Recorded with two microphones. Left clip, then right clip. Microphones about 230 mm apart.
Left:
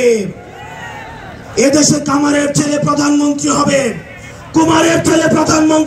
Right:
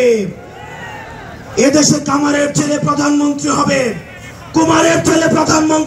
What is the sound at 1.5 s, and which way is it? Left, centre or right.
A man's voice, left.